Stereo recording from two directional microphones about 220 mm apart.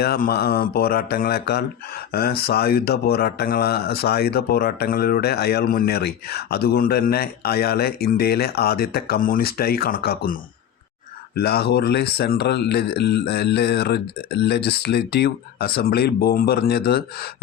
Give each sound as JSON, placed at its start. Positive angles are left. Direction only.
{"t": 0.0, "sound": "speech", "side_deg": 45}
{"t": 11.3, "sound": "speech", "side_deg": 45}